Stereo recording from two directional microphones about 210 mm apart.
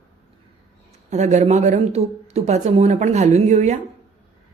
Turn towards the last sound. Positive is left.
turn(degrees=-35)  # may be behind; listen again after turning